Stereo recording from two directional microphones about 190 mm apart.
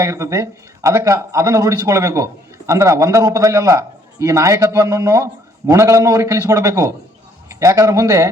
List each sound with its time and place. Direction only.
0.0 s a man's voice: 15° right (ahead or behind)